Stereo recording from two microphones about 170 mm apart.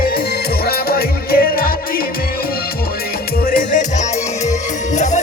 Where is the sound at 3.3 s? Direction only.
55° left (ahead or behind).